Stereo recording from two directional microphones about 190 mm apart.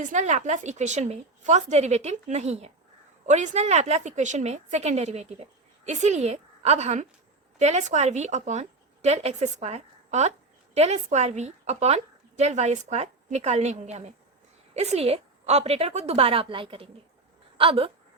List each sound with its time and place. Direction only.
0.0 s a woman's voice: 40° right (ahead or behind)